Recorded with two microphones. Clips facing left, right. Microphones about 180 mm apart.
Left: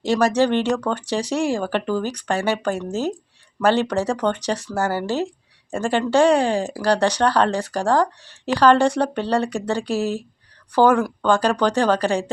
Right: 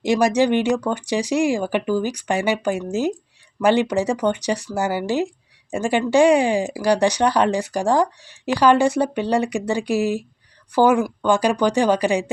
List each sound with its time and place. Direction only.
0.0 s speech: 10° right (ahead or behind)